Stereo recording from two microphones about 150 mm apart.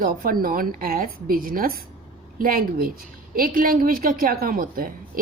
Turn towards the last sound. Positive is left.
turn(degrees=-70)  # may be behind; listen again after turning